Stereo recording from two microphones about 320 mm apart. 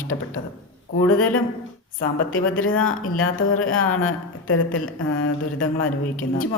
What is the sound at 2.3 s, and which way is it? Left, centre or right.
A woman's voice, left.